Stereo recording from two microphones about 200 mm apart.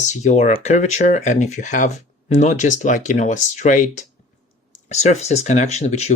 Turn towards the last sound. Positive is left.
turn(degrees=35)  # may be behind; listen again after turning